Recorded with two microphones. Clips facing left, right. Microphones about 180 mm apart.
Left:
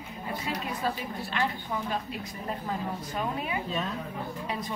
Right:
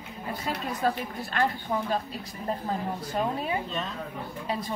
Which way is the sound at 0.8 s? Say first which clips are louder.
Right 7 dB; 45° right (ahead or behind).